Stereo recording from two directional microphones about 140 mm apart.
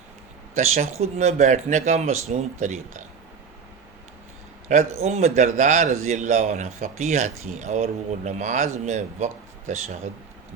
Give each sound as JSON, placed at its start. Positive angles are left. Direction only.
{"t": 0.5, "sound": "speech", "side_deg": -50}
{"t": 4.7, "sound": "a man's voice", "side_deg": -50}